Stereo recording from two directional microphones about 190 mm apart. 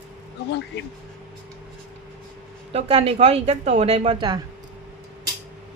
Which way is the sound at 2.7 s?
30° right (ahead or behind).